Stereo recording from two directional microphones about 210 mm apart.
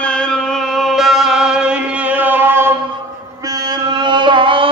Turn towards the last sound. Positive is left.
turn(degrees=-25)  # may be behind; listen again after turning